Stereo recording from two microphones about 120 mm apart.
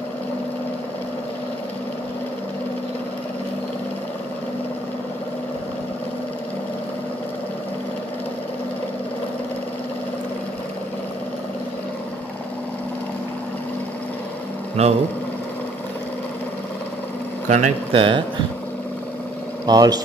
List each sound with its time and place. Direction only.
14.8 s speech: 60° right (ahead or behind)
17.5 s speech: 75° right (ahead or behind)
17.9 s speech: 45° right (ahead or behind)
19.6 s speech: 35° right (ahead or behind)